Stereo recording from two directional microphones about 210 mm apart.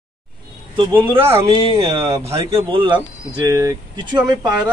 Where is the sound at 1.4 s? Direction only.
25° right (ahead or behind).